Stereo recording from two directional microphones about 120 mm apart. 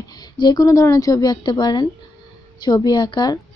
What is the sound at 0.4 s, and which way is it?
A woman's voice, 30° left (ahead or behind).